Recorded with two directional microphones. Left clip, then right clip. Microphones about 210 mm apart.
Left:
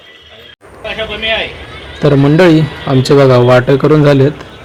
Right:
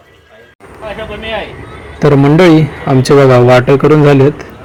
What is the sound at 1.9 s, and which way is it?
A man's voice, 10° right (ahead or behind).